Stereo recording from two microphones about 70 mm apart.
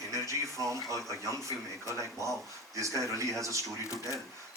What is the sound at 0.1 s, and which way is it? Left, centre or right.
Speech, right.